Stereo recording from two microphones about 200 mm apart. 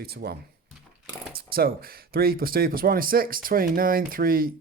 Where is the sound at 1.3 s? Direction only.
50° right (ahead or behind).